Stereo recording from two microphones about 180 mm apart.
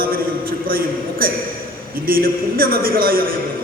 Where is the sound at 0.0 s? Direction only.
55° right (ahead or behind).